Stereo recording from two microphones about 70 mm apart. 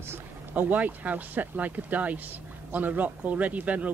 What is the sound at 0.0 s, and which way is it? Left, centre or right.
Speech, right.